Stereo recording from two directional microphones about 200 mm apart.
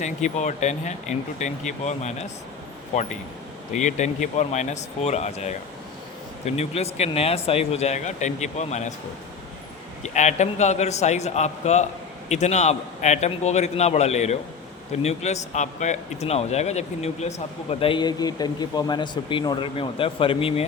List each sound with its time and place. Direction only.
0.0 s speech: 35° left (ahead or behind)
10.0 s speech: 35° left (ahead or behind)